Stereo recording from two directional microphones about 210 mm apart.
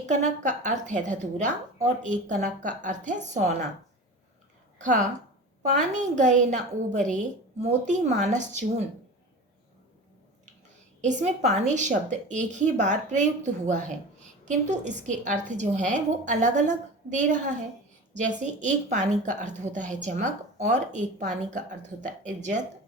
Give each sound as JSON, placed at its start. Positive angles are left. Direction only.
{"t": 0.0, "sound": "a woman's voice", "side_deg": -35}
{"t": 5.9, "sound": "a woman's voice", "side_deg": -35}
{"t": 11.0, "sound": "a woman's voice", "side_deg": -35}